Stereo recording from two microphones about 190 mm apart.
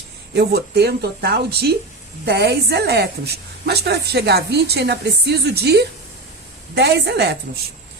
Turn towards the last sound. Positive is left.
turn(degrees=-60)  # may be behind; listen again after turning